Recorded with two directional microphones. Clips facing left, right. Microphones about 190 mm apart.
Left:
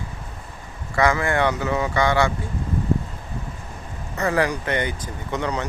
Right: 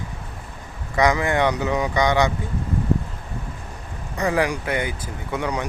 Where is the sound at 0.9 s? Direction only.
15° right (ahead or behind).